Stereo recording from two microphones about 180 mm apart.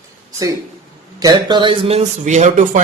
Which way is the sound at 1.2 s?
25° right (ahead or behind).